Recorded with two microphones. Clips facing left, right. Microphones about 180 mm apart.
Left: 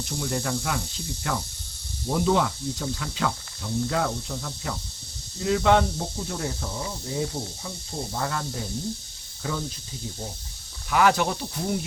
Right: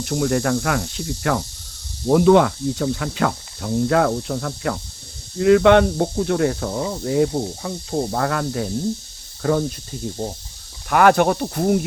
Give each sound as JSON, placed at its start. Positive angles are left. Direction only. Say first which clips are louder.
{"t": 0.0, "sound": "speech", "louder": "right 9 dB", "side_deg": -65}
{"t": 9.4, "sound": "speech", "louder": "right 11 dB", "side_deg": -55}
{"t": 10.8, "sound": "speech", "louder": "right 7 dB", "side_deg": -55}